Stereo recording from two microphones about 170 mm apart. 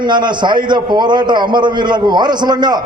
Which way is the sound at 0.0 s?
25° right (ahead or behind).